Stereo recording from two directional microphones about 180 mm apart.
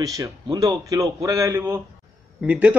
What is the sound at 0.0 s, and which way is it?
A man's voice, 20° right (ahead or behind).